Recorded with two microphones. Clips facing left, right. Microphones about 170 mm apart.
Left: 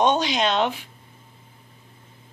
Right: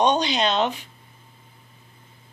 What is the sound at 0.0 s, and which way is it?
Speech, 5° left (ahead or behind).